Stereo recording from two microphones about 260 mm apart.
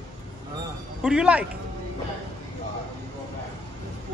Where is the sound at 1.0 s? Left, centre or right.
Centre.